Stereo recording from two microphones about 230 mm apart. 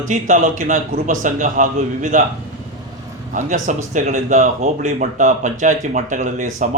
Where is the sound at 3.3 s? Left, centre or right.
Right.